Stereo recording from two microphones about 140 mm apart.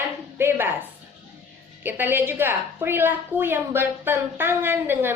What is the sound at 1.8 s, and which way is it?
Speech, 15° right (ahead or behind).